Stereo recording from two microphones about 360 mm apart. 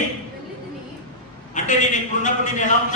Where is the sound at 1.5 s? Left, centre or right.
Left.